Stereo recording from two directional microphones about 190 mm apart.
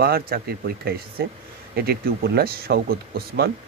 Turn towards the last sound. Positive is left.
turn(degrees=-55)  # may be behind; listen again after turning